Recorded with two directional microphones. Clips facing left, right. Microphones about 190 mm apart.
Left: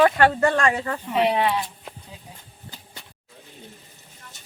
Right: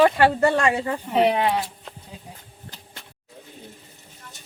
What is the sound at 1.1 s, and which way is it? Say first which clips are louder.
Speech: right 1 dB; 40° right (ahead or behind).